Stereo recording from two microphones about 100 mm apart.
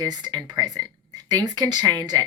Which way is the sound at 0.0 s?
40° right (ahead or behind).